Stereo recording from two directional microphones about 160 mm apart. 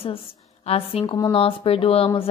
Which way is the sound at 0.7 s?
35° left (ahead or behind).